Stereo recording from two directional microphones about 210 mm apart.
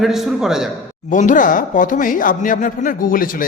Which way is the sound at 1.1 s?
40° left (ahead or behind).